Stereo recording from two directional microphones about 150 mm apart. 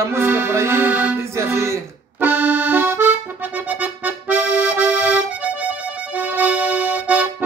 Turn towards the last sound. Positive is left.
turn(degrees=-10)  # may be behind; listen again after turning